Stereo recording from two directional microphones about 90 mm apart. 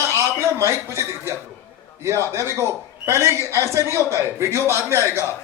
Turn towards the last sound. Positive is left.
turn(degrees=-30)  # may be behind; listen again after turning